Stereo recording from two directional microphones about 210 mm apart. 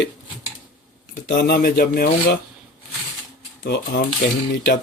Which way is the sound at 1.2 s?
50° left (ahead or behind).